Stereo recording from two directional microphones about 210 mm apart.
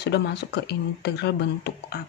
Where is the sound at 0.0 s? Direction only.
55° left (ahead or behind).